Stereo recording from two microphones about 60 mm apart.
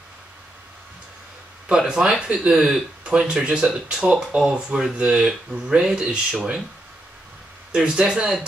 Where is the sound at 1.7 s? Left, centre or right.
Centre.